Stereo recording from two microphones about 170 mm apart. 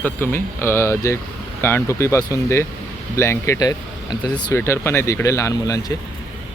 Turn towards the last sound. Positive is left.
turn(degrees=20)  # may be behind; listen again after turning